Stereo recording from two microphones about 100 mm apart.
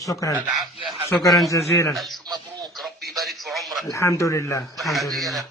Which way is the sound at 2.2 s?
40° right (ahead or behind).